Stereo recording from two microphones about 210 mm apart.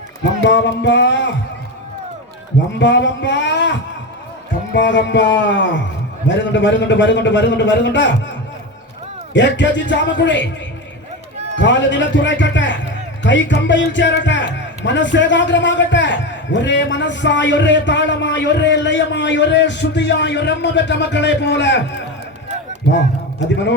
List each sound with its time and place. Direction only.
0.4 s a man's voice: 55° left (ahead or behind)
2.7 s a man's voice: 60° left (ahead or behind)
9.3 s a man's voice: 60° left (ahead or behind)
11.5 s a man's voice: 60° left (ahead or behind)